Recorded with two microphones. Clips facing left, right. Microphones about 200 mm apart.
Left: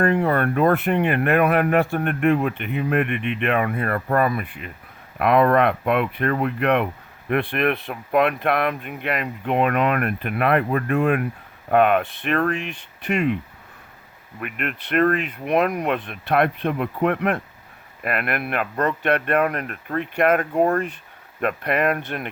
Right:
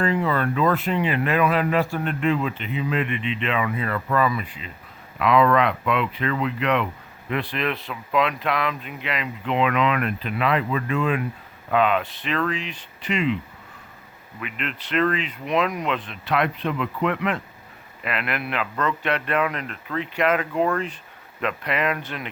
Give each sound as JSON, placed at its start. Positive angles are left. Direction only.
{"t": 0.0, "sound": "speech", "side_deg": 55}
{"t": 14.4, "sound": "speech", "side_deg": 55}